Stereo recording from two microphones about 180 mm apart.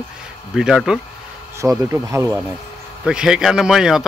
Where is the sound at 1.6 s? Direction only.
15° right (ahead or behind).